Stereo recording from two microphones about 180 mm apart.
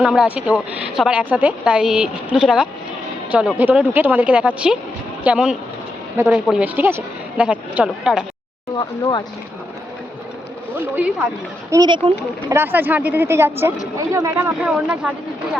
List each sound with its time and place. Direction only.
0.0 s speech: 5° right (ahead or behind)
11.7 s speech: 25° right (ahead or behind)
12.5 s speech: 10° right (ahead or behind)